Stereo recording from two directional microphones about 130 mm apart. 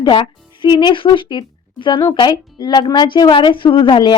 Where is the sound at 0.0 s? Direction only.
40° left (ahead or behind).